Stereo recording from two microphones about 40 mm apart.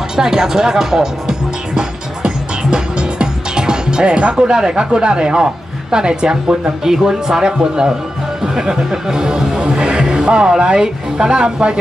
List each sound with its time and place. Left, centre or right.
0.1 s speech: centre
1.8 s music: centre
6.8 s speech: centre